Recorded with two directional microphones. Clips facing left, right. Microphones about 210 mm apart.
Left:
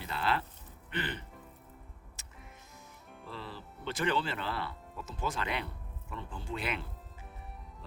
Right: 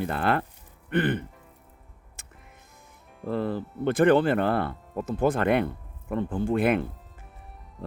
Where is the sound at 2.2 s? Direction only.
55° right (ahead or behind).